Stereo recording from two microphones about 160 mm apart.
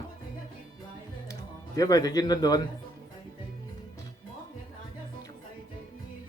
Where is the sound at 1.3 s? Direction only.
20° left (ahead or behind).